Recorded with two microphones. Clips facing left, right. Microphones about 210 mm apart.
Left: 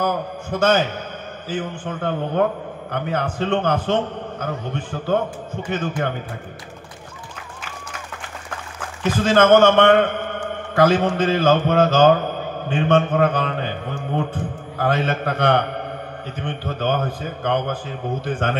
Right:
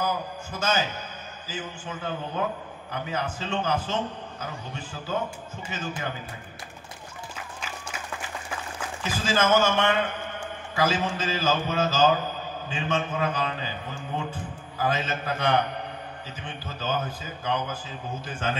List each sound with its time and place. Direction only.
0.0 s a man's voice: 60° left (ahead or behind)
9.0 s a man's voice: 60° left (ahead or behind)